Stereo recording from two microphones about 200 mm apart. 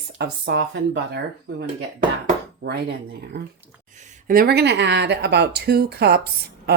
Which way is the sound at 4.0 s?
45° right (ahead or behind).